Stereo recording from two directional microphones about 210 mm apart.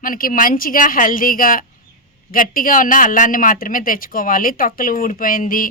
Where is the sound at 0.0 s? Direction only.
40° left (ahead or behind).